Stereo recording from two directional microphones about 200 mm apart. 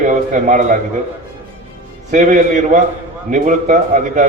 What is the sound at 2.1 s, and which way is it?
A man's voice, 40° right (ahead or behind).